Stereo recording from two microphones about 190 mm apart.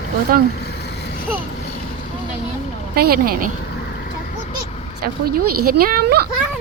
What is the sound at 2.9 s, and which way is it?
Speech, 50° right (ahead or behind).